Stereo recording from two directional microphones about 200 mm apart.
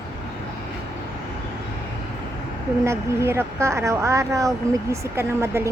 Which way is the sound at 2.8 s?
10° right (ahead or behind).